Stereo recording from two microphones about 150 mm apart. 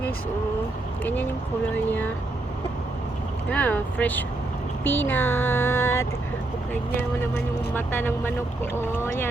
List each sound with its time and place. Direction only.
1.0 s speech: 10° left (ahead or behind)
3.5 s speech: 10° left (ahead or behind)
7.2 s speech: 15° left (ahead or behind)